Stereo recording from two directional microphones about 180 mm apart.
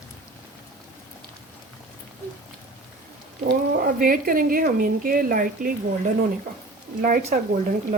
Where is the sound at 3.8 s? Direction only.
50° right (ahead or behind).